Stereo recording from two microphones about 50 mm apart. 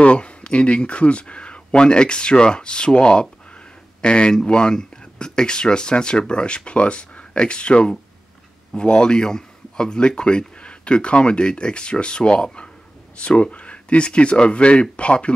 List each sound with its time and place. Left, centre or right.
0.0 s speech: left